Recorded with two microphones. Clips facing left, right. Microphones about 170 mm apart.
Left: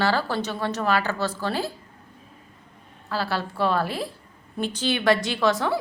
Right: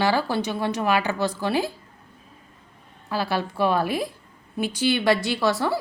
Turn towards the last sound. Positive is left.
turn(degrees=-10)  # may be behind; listen again after turning